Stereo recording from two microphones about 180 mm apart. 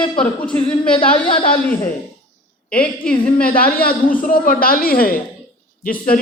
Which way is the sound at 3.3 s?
55° left (ahead or behind).